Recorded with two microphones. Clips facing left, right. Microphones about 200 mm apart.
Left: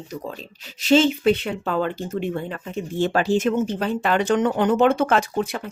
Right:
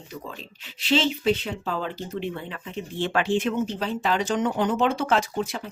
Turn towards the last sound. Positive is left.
turn(degrees=55)  # may be behind; listen again after turning